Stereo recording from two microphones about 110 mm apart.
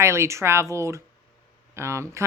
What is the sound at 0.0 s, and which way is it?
Speech, 25° right (ahead or behind).